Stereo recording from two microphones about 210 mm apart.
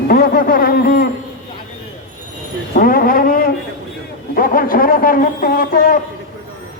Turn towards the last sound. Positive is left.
turn(degrees=40)  # may be behind; listen again after turning